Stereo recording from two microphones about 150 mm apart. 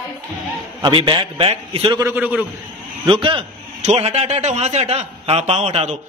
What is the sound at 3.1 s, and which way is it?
A man's voice, 35° right (ahead or behind).